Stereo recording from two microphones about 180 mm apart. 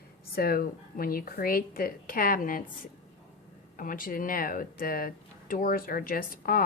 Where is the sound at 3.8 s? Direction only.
50° left (ahead or behind).